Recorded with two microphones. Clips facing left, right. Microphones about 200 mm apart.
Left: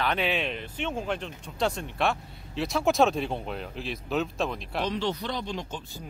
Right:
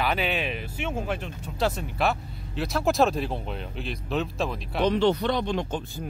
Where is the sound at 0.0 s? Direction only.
5° right (ahead or behind).